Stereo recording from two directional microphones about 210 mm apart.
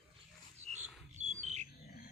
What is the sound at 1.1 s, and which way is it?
Bird, 35° right (ahead or behind).